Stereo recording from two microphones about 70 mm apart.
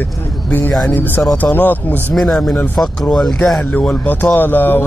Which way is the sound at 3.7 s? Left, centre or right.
Left.